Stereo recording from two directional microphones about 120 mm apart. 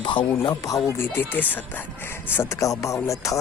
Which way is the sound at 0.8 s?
20° left (ahead or behind).